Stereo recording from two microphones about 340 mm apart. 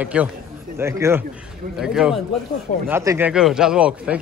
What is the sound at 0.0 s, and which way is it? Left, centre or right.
Speech, centre.